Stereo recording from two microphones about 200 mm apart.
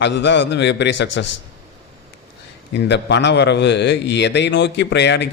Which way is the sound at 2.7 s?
60° left (ahead or behind).